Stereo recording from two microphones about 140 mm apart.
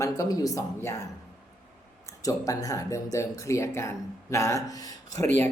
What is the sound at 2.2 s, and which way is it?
A woman's voice, 25° left (ahead or behind).